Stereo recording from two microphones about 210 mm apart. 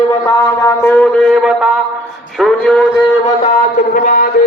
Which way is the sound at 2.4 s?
5° left (ahead or behind).